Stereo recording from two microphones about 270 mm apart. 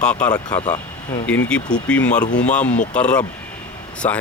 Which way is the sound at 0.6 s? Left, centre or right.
Left.